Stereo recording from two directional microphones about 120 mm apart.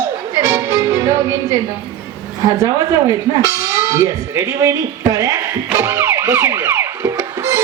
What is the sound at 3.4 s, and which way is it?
Speech, 25° right (ahead or behind).